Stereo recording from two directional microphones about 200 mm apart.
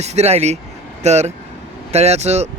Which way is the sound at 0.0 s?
35° right (ahead or behind).